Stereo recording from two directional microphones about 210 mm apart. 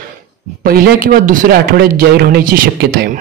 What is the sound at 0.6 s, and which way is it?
A man's voice, 45° right (ahead or behind).